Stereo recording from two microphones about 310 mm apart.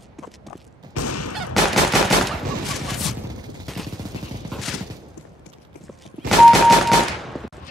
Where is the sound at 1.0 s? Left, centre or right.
Left.